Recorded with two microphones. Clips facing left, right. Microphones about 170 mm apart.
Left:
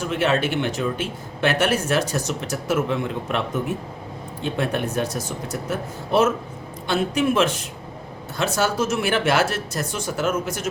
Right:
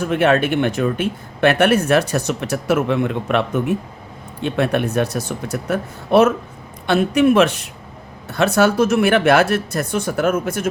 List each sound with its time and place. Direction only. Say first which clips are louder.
0.0 s speech: right 5 dB; 55° right (ahead or behind)